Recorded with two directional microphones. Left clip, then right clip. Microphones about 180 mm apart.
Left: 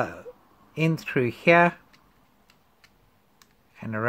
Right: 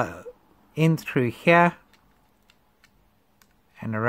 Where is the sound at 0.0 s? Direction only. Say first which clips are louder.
Right 1 dB; 20° right (ahead or behind).